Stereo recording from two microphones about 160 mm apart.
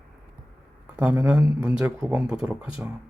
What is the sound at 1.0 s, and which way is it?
Speech, 10° right (ahead or behind).